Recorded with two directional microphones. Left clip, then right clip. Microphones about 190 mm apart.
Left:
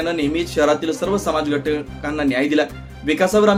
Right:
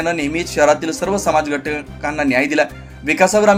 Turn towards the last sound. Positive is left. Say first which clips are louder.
# right 3 dB
turn(degrees=-15)  # may be behind; listen again after turning